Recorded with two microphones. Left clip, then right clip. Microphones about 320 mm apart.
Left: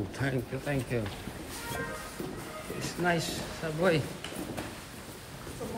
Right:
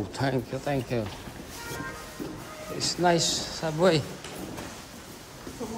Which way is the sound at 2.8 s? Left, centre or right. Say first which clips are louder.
Right 7 dB; centre.